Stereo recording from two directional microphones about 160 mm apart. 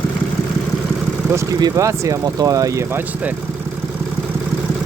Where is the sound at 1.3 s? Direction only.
20° right (ahead or behind).